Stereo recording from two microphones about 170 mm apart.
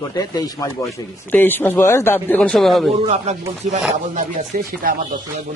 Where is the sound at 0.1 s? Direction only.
20° left (ahead or behind).